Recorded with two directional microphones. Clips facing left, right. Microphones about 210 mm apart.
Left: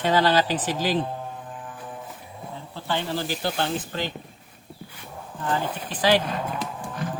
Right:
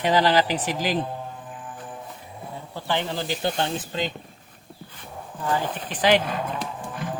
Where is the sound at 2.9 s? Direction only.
15° right (ahead or behind).